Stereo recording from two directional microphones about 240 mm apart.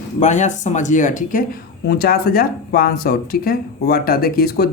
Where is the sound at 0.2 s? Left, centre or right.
Left.